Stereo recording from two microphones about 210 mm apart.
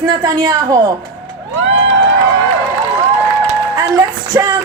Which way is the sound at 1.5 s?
65° right (ahead or behind).